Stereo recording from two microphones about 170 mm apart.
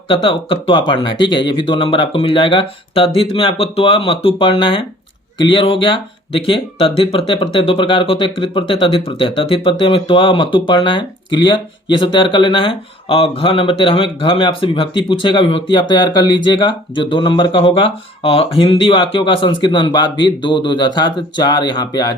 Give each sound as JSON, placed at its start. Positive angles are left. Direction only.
{"t": 0.1, "sound": "speech", "side_deg": 30}